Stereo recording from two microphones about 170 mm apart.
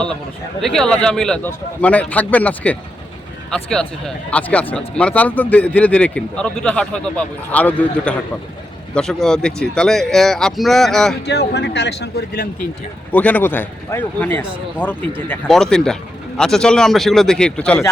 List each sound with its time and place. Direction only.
0.6 s speech: 5° left (ahead or behind)
11.3 s speech: 80° left
13.1 s speech: 10° left (ahead or behind)